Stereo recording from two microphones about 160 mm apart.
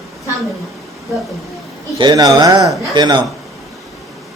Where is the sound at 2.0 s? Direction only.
25° right (ahead or behind).